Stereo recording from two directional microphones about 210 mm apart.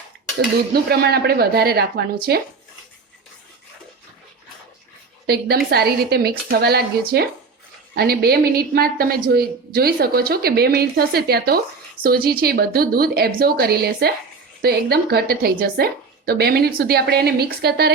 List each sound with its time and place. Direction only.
0.3 s a woman's voice: 50° right (ahead or behind)
5.2 s a woman's voice: 50° right (ahead or behind)